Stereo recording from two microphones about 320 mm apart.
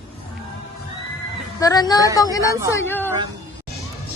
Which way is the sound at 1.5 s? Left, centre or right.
Centre.